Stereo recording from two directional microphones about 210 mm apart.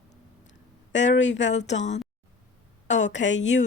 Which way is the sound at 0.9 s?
60° left (ahead or behind).